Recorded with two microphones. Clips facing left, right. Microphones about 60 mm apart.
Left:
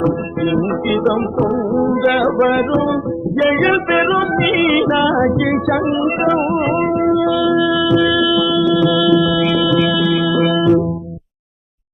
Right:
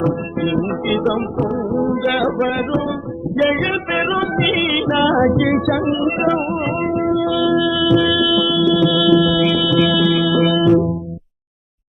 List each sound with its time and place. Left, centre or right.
0.0 s music: centre
1.0 s music: centre
1.5 s music: centre
2.0 s music: centre
3.8 s music: centre